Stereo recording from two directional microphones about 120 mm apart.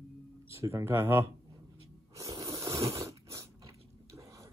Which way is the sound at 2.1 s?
25° right (ahead or behind).